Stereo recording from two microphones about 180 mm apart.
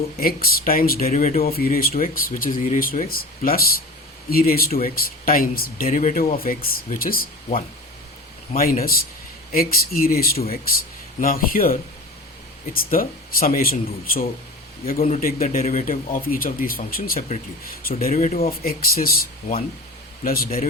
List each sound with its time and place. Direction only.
0.2 s speech: 55° left (ahead or behind)
8.8 s speech: 55° left (ahead or behind)
15.0 s a man's voice: 40° left (ahead or behind)
18.6 s speech: 55° left (ahead or behind)